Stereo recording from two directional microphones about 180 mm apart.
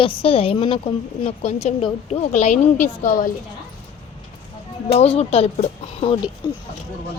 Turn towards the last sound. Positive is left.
turn(degrees=20)  # may be behind; listen again after turning